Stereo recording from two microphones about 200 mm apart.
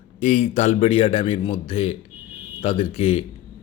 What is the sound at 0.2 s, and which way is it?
A man's voice, 35° left (ahead or behind).